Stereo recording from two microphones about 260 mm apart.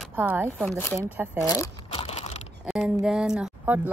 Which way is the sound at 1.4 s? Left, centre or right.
Centre.